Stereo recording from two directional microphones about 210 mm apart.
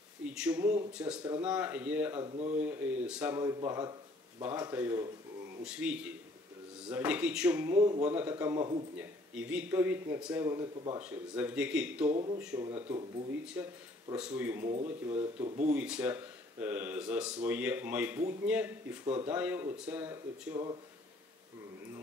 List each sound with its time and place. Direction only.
0.2 s speech: 5° right (ahead or behind)
2.2 s speech: 30° right (ahead or behind)
2.6 s speech: 5° right (ahead or behind)
11.0 s speech: 5° right (ahead or behind)
12.1 s speech: 25° right (ahead or behind); by 14.7 s 10° right (ahead or behind)
15.3 s speech: 30° right (ahead or behind)
15.7 s speech: 5° right (ahead or behind)